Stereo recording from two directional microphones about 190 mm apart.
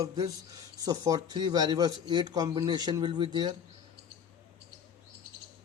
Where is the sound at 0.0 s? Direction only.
20° right (ahead or behind).